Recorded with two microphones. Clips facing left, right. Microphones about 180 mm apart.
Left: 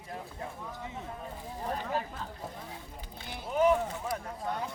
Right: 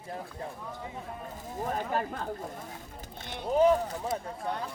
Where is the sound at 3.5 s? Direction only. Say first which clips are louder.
Right 3 dB; 35° right (ahead or behind).